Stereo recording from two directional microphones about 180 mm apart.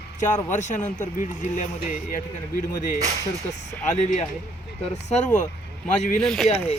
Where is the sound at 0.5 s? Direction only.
40° left (ahead or behind).